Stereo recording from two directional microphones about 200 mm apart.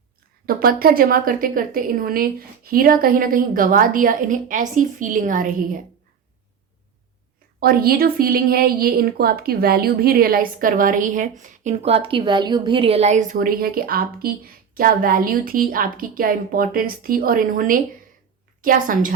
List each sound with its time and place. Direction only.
0.4 s a woman's voice: 50° right (ahead or behind)
7.6 s a woman's voice: 50° right (ahead or behind)